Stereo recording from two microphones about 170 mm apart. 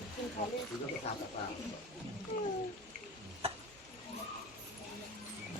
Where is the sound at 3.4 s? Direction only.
35° right (ahead or behind).